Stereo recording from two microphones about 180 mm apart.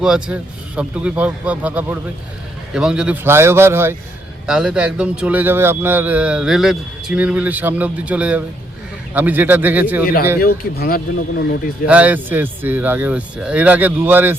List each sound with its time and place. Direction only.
0.0 s speech: 5° right (ahead or behind)
10.4 s speech: 55° left (ahead or behind)
11.9 s speech: 10° right (ahead or behind)